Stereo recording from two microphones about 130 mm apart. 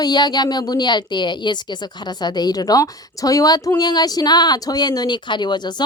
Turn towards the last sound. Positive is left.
turn(degrees=35)  # may be behind; listen again after turning